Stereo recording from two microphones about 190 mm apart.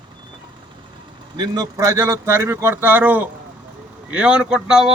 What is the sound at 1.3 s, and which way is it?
A man's voice, 20° right (ahead or behind).